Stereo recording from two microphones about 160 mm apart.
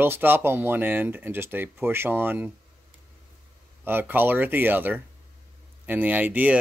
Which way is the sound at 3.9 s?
10° right (ahead or behind).